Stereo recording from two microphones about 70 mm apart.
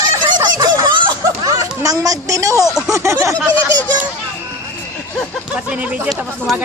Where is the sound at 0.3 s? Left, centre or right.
Right.